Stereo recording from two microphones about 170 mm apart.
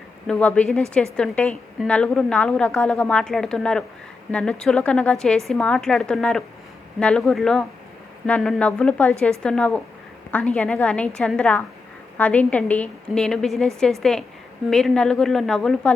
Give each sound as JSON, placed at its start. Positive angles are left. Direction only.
{"t": 0.3, "sound": "a woman's voice", "side_deg": 5}